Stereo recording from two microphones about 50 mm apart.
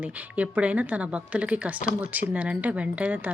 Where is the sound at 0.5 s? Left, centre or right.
Right.